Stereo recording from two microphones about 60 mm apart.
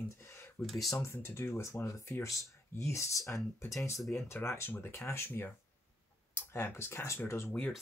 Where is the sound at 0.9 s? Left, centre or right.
Left.